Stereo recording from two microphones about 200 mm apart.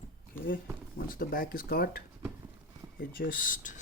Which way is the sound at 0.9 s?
45° left (ahead or behind).